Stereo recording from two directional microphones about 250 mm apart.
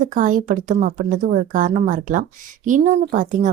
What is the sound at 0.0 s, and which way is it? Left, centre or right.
A woman's voice, right.